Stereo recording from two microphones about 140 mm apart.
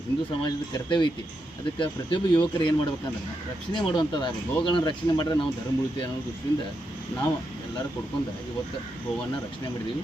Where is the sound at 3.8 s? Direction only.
35° left (ahead or behind).